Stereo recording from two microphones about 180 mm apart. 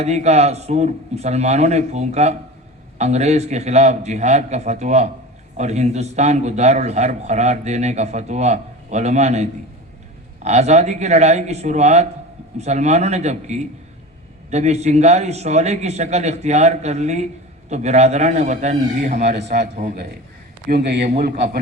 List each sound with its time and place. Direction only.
0.0 s a man's voice: 40° right (ahead or behind)
19.5 s speech: 65° right (ahead or behind)
19.7 s a man's voice: 50° right (ahead or behind)
20.7 s a man's voice: 65° right (ahead or behind)